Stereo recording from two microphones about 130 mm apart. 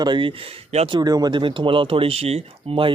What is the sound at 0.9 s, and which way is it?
Speech, 30° right (ahead or behind).